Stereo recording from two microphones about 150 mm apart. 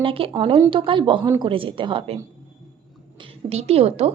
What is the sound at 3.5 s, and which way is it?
Speech, 45° right (ahead or behind).